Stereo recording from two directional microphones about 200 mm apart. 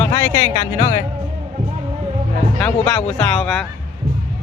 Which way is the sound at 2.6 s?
5° left (ahead or behind).